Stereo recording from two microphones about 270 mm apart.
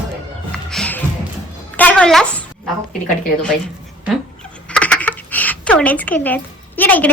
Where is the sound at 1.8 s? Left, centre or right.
Centre.